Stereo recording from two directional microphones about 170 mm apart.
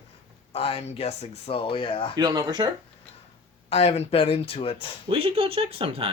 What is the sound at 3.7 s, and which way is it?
Speech, 40° left (ahead or behind).